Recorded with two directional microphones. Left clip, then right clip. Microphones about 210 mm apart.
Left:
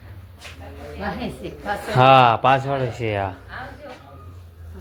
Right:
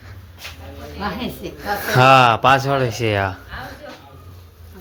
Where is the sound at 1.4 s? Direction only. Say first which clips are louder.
Right 4 dB; 15° right (ahead or behind).